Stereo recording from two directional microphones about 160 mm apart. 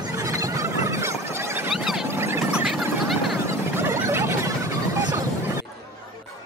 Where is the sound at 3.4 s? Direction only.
15° right (ahead or behind).